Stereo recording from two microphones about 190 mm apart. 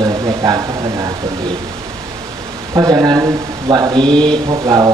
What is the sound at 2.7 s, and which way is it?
Speech, 20° right (ahead or behind).